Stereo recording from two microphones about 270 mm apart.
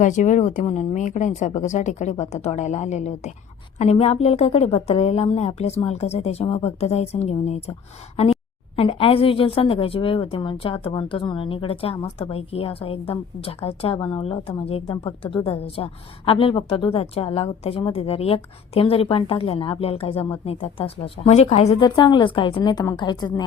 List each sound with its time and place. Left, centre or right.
0.0 s a woman's voice: left